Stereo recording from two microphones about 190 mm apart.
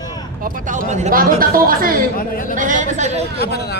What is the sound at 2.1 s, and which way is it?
Speech, 50° left (ahead or behind).